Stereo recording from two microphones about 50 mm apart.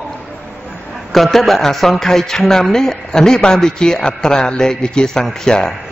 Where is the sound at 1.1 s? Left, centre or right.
Centre.